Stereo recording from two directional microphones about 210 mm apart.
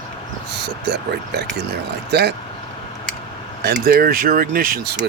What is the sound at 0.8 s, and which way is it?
Speech, 55° right (ahead or behind).